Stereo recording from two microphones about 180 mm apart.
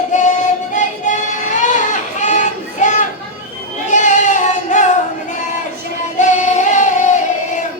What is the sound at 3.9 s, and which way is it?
Music, 45° left (ahead or behind).